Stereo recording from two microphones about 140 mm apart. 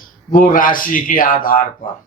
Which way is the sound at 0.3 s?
80° left.